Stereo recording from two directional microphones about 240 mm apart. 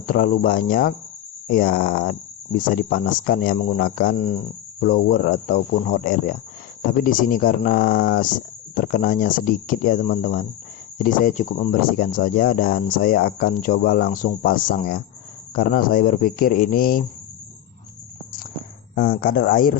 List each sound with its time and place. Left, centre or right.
0.0 s speech: left
18.9 s speech: left